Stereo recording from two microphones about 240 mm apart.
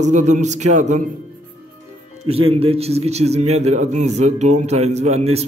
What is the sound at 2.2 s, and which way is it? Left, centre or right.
A man's voice, right.